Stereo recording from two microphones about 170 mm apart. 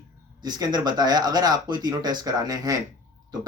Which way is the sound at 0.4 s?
25° right (ahead or behind).